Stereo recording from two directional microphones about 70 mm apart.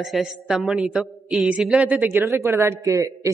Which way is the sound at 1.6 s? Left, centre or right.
Centre.